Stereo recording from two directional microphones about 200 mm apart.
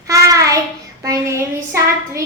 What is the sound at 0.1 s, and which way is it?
Child singing, 15° right (ahead or behind).